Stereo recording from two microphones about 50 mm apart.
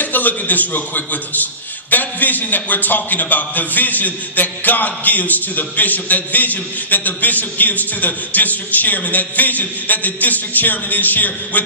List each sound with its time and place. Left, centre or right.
0.0 s a man's voice: left